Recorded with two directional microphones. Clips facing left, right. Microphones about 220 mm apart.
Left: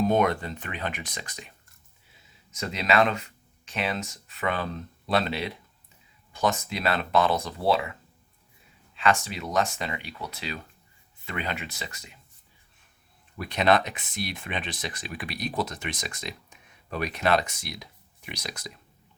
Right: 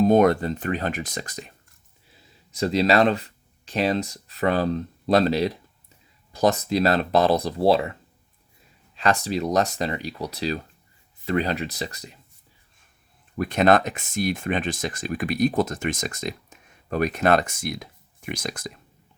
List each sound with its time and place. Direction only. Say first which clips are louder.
0.0 s speech: right 6 dB; 40° right (ahead or behind)
9.0 s speech: right 3 dB; 40° right (ahead or behind)
13.3 s speech: right 5 dB; 50° right (ahead or behind)